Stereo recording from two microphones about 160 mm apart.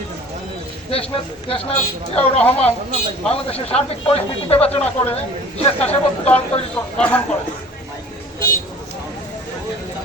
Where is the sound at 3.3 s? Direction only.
40° left (ahead or behind).